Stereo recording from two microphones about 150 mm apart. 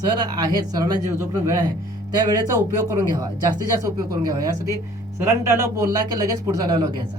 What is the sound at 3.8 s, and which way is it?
Speech, 25° right (ahead or behind).